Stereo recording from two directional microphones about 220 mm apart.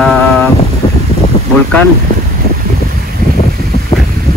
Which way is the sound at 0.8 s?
25° left (ahead or behind).